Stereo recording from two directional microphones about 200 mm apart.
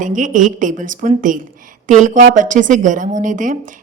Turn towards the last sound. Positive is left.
turn(degrees=-40)  # may be behind; listen again after turning